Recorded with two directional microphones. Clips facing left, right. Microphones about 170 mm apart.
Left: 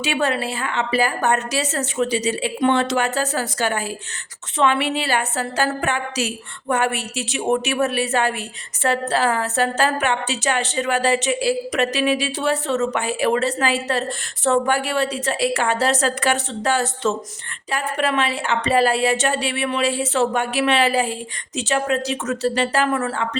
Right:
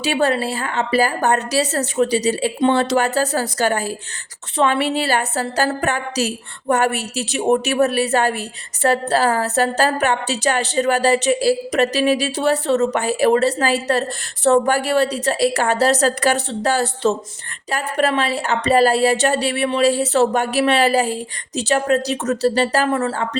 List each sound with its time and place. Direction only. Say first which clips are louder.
0.0 s a woman's voice: right 3 dB; 35° right (ahead or behind)